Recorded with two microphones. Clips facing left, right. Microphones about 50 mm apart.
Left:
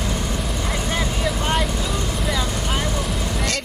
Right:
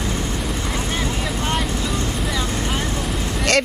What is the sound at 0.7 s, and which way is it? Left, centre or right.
Vehicle, centre.